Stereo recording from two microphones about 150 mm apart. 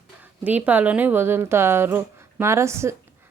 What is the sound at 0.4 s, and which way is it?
A woman's voice, 10° right (ahead or behind).